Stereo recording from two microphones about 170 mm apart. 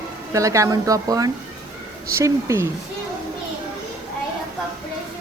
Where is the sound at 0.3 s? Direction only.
20° right (ahead or behind).